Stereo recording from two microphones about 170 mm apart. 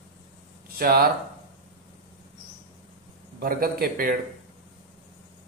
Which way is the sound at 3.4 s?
60° right (ahead or behind).